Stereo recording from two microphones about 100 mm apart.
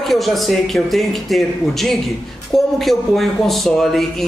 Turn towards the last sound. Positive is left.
turn(degrees=0)  # may be behind; listen again after turning